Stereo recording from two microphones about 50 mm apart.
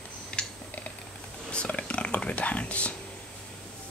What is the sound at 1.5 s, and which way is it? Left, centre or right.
Whispering, left.